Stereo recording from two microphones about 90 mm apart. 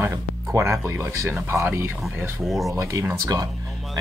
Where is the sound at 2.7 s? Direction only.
35° right (ahead or behind).